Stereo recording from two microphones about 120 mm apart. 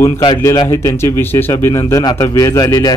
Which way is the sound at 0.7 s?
20° left (ahead or behind).